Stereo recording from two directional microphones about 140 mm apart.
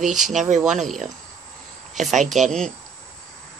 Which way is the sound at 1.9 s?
60° right (ahead or behind).